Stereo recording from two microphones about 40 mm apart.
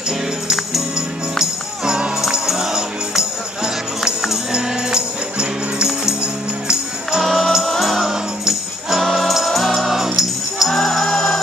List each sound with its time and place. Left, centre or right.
2.4 s music: centre
7.2 s music: centre
8.0 s music: centre
10.7 s music: centre